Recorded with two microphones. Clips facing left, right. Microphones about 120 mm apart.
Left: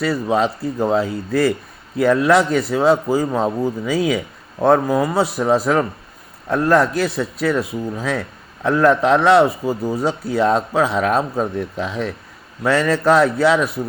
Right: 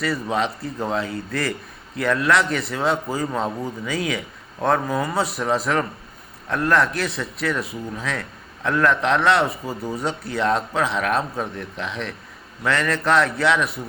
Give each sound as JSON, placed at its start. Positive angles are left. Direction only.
{"t": 0.0, "sound": "a man's voice", "side_deg": 30}